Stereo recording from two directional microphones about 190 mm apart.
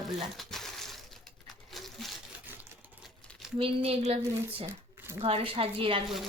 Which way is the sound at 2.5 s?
10° right (ahead or behind).